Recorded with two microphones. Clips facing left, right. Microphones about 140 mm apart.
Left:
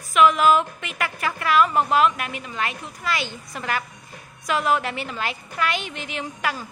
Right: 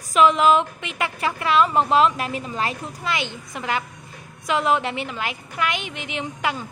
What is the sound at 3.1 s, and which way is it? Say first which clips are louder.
A woman's voice: even; 20° right (ahead or behind).